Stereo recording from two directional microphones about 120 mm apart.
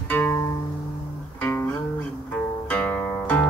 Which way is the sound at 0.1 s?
20° left (ahead or behind).